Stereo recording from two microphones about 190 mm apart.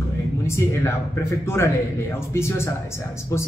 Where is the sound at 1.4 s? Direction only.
15° left (ahead or behind).